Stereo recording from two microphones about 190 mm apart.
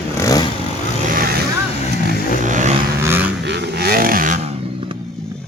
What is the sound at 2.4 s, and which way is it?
Vehicle, 40° right (ahead or behind).